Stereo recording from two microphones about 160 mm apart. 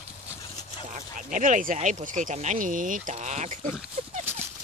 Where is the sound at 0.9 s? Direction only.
55° right (ahead or behind).